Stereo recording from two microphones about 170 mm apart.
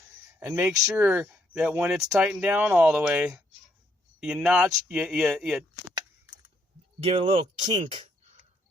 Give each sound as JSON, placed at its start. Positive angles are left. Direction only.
{"t": 0.3, "sound": "speech", "side_deg": -10}
{"t": 7.0, "sound": "speech", "side_deg": -35}